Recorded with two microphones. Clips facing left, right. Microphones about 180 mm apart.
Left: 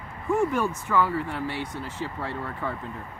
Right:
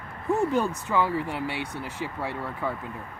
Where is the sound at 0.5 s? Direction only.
20° right (ahead or behind).